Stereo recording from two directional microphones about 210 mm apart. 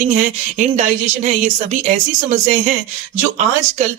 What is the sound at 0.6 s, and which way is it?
Speech, 35° right (ahead or behind).